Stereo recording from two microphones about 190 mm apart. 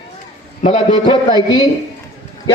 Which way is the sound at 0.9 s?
25° left (ahead or behind).